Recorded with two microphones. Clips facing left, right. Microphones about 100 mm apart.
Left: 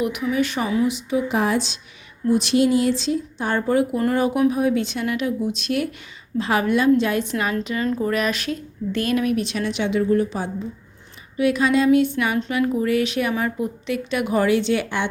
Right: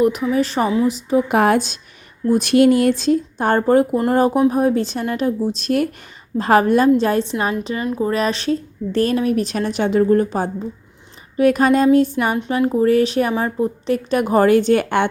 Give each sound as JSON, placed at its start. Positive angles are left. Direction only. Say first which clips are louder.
{"t": 0.0, "sound": "speech", "louder": "right 5 dB", "side_deg": -35}
{"t": 1.3, "sound": "a woman's voice", "louder": "right 6 dB", "side_deg": -55}